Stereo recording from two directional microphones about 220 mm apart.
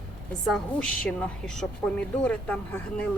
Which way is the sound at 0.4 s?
5° left (ahead or behind).